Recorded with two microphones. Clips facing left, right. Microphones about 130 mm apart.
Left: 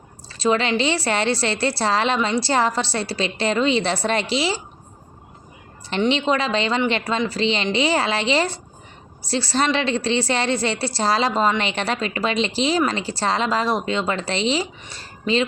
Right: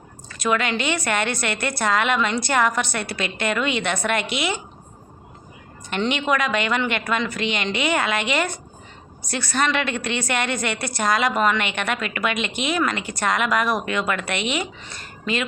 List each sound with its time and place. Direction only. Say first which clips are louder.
0.3 s a woman's voice: left 3 dB; 30° left (ahead or behind)
6.1 s a woman's voice: left 2 dB; 30° left (ahead or behind)